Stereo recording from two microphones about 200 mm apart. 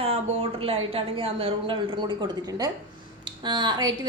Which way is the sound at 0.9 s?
30° right (ahead or behind).